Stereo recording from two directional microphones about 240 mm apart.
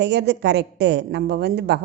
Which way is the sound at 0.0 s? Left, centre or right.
Right.